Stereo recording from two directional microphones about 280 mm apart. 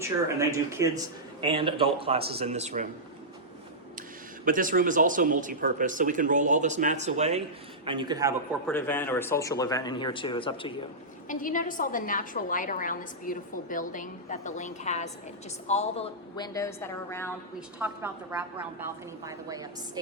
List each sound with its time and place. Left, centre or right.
0.3 s speech: centre
4.4 s a man's voice: right
8.6 s speech: centre
11.3 s a woman's voice: left; by 17.3 s centre
17.7 s a woman's voice: centre